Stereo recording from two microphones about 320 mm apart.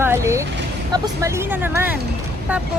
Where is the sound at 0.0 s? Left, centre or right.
Centre.